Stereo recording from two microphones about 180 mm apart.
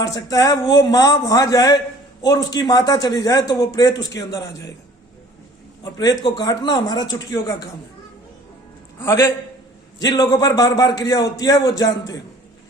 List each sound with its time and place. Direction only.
0.0 s a man's voice: 20° left (ahead or behind)
5.8 s a man's voice: 20° left (ahead or behind)
9.0 s a man's voice: 15° left (ahead or behind)